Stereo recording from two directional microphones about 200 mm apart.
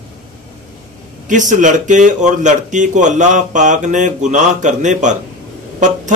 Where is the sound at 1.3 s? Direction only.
40° right (ahead or behind).